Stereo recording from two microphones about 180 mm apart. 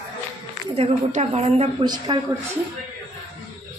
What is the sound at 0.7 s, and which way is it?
A woman's voice, 35° right (ahead or behind).